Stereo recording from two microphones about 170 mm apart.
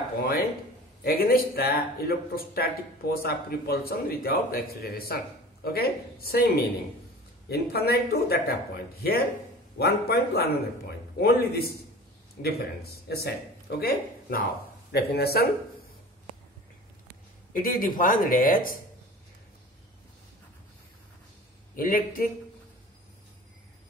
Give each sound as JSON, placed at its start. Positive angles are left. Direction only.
{"t": 0.2, "sound": "speech", "side_deg": 65}
{"t": 14.9, "sound": "speech", "side_deg": 70}
{"t": 17.5, "sound": "speech", "side_deg": 55}
{"t": 21.7, "sound": "speech", "side_deg": 55}